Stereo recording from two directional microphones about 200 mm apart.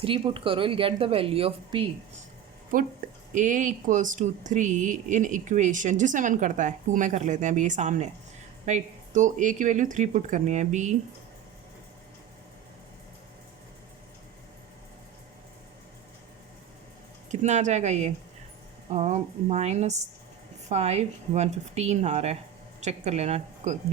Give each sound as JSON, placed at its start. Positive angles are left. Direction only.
{"t": 0.0, "sound": "speech", "side_deg": -25}
{"t": 2.7, "sound": "a woman's voice", "side_deg": -45}
{"t": 17.4, "sound": "a woman's voice", "side_deg": -35}